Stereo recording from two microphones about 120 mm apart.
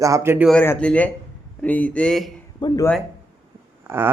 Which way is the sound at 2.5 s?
35° left (ahead or behind).